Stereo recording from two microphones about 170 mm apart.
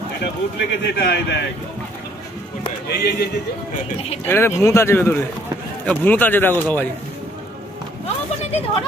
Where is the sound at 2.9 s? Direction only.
75° left (ahead or behind).